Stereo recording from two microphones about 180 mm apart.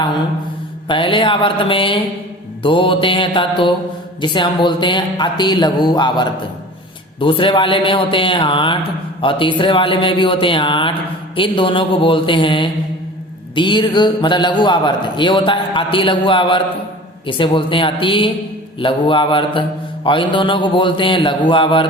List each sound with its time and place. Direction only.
0.9 s a man's voice: 25° left (ahead or behind)